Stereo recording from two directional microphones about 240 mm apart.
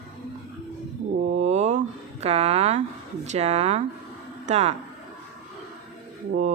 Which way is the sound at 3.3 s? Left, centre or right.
Right.